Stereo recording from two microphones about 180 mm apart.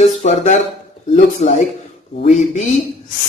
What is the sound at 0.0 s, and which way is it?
Speech, 40° left (ahead or behind).